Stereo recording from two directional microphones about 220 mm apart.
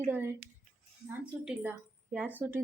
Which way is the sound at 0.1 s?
10° right (ahead or behind).